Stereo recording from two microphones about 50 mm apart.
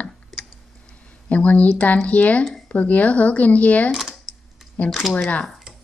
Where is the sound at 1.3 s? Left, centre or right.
Left.